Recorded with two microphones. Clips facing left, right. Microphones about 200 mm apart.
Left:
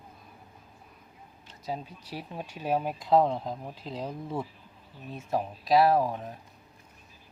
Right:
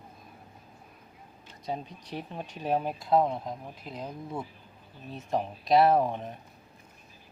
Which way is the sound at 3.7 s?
30° left (ahead or behind).